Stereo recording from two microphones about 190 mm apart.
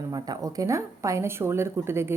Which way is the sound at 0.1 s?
20° right (ahead or behind).